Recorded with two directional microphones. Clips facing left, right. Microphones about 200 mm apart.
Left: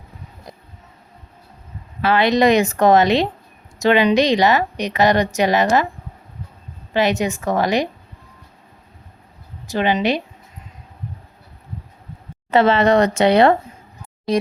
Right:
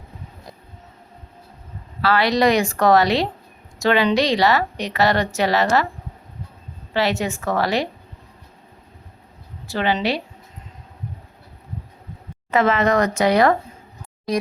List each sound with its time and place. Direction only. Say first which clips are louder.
2.0 s a woman's voice: left 2 dB; 20° left (ahead or behind)
6.9 s a woman's voice: left 3 dB; 15° left (ahead or behind)
9.6 s a woman's voice: left 3 dB; 15° left (ahead or behind)
12.5 s a woman's voice: left 4 dB; 30° left (ahead or behind)